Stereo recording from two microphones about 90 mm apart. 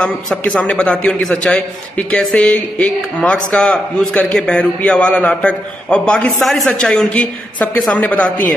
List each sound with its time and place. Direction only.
0.4 s a man's voice: 10° left (ahead or behind)